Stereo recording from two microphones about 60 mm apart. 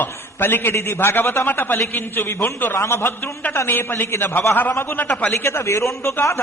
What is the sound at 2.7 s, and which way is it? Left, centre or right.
A man's voice, left.